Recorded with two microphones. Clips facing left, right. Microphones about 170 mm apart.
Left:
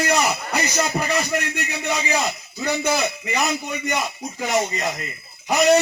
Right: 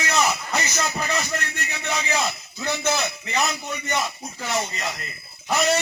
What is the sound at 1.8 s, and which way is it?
A man's voice, 15° left (ahead or behind).